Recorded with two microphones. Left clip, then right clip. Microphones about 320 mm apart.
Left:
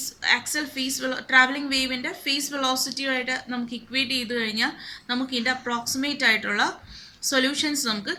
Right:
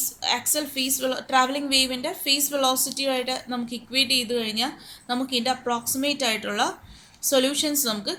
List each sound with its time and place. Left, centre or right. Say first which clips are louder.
0.2 s a woman's voice: left 2 dB; centre